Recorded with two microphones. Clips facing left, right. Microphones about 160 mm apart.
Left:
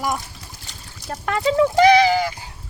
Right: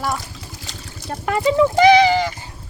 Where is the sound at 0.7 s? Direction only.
90° right.